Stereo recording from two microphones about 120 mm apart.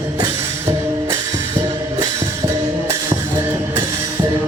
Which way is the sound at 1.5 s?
35° right (ahead or behind).